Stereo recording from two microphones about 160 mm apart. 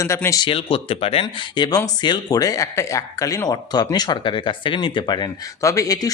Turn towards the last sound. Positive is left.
turn(degrees=20)  # may be behind; listen again after turning